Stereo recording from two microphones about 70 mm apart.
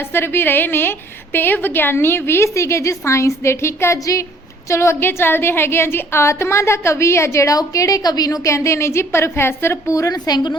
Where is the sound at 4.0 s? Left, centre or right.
Left.